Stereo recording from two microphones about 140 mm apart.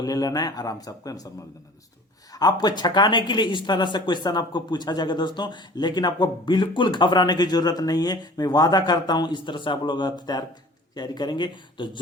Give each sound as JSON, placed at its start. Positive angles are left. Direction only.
{"t": 0.0, "sound": "speech", "side_deg": 25}
{"t": 2.3, "sound": "speech", "side_deg": 30}